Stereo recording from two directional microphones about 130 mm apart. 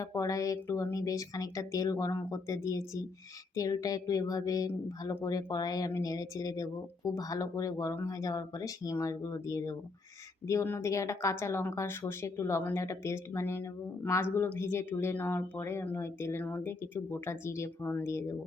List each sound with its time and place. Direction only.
0.0 s speech: 25° left (ahead or behind)